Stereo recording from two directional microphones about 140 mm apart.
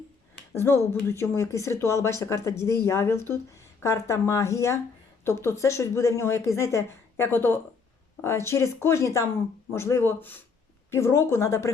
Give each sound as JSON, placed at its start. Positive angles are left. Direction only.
{"t": 0.5, "sound": "speech", "side_deg": 15}